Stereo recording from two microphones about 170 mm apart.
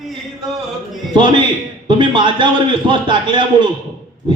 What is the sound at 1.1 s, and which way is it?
A man's voice, 30° right (ahead or behind).